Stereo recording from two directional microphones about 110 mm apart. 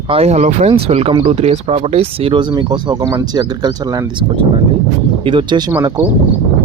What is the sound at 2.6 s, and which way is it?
Speech, 45° right (ahead or behind).